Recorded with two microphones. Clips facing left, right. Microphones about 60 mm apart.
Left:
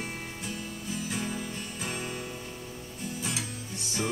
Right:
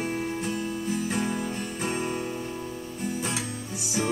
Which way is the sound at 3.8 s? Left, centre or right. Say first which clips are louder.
Right 4 dB; centre.